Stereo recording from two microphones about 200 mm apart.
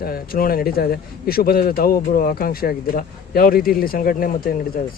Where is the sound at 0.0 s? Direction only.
50° left (ahead or behind).